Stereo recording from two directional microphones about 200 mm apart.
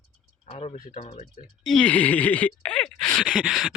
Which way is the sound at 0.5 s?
30° left (ahead or behind).